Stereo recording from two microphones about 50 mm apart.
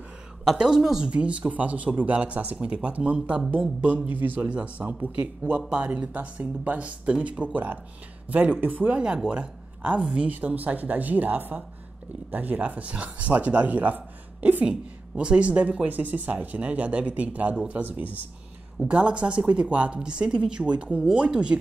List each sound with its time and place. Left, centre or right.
0.6 s speech: centre
1.1 s speech: right
8.9 s speech: centre
10.3 s speech: right
14.6 s speech: right
18.9 s speech: right